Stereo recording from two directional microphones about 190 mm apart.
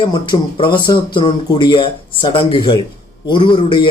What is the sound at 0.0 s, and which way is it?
Speech, 25° left (ahead or behind).